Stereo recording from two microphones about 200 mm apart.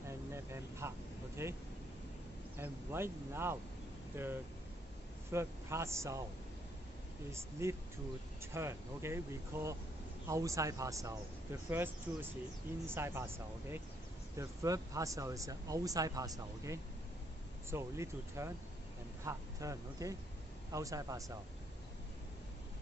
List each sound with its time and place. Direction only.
0.3 s vehicle: 15° right (ahead or behind)
2.5 s speech: 10° right (ahead or behind)
8.4 s speech: 10° right (ahead or behind)